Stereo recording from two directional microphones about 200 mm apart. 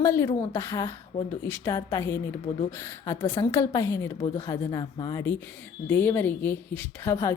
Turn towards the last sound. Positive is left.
turn(degrees=15)  # may be behind; listen again after turning